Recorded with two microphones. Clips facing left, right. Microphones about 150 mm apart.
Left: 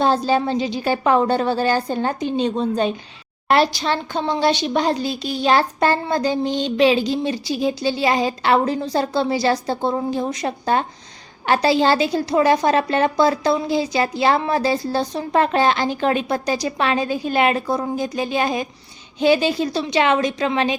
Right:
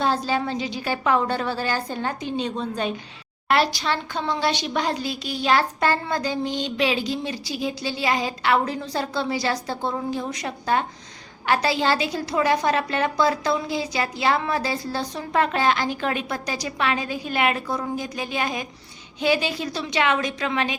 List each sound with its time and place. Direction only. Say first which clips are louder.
0.0 s a woman's voice: left 5 dB; 30° left (ahead or behind)